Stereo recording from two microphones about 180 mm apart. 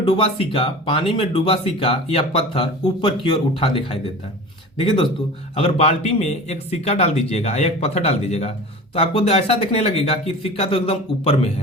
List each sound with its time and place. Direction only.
0.0 s speech: 30° left (ahead or behind)
5.5 s speech: 35° left (ahead or behind)